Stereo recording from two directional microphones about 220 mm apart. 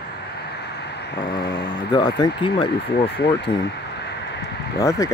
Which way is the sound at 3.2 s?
50° left (ahead or behind).